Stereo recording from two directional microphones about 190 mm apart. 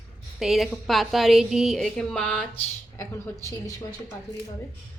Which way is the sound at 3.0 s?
15° left (ahead or behind).